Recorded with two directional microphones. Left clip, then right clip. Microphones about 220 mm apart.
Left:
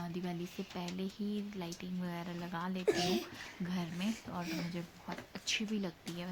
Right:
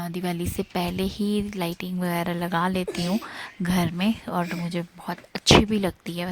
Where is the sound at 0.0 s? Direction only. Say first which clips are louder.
Right 12 dB; 50° right (ahead or behind).